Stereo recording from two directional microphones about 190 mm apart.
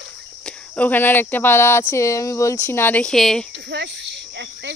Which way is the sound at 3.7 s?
65° right (ahead or behind).